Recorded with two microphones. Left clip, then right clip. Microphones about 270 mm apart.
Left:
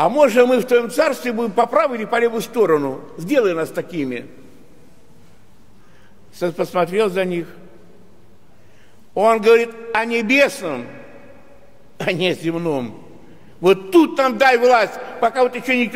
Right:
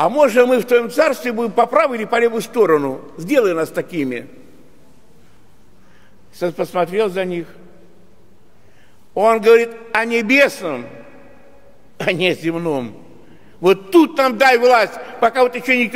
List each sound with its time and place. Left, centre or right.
0.0 s a man's voice: centre; by 4.3 s right
6.3 s a man's voice: centre
9.1 s a man's voice: centre
12.0 s a man's voice: centre